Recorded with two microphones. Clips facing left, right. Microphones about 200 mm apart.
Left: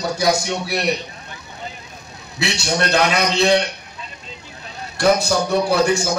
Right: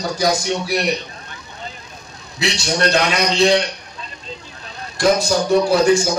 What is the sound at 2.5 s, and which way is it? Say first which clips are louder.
Speech: right 1 dB; 60° left (ahead or behind).